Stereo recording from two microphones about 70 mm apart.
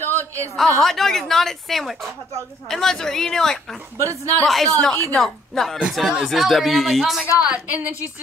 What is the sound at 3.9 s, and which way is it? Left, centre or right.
Speech, right.